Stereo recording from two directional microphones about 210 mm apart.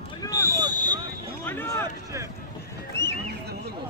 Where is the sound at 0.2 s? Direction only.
15° left (ahead or behind).